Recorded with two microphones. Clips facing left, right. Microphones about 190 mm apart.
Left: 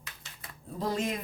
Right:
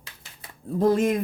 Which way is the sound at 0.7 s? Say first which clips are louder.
Right 11 dB; 50° right (ahead or behind).